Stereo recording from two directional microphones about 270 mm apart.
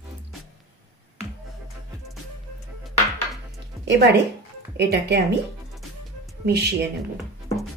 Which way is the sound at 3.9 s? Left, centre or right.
Right.